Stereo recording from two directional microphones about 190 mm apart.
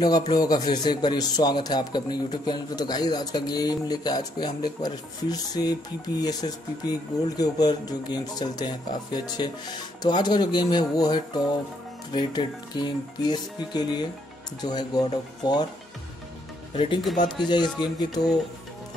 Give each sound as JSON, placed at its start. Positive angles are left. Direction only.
{"t": 0.0, "sound": "speech", "side_deg": 20}
{"t": 16.7, "sound": "speech", "side_deg": 30}